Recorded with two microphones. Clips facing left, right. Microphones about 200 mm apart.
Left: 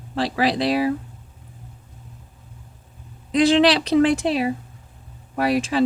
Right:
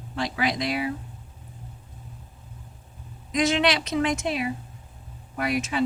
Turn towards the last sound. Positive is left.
turn(degrees=30)  # may be behind; listen again after turning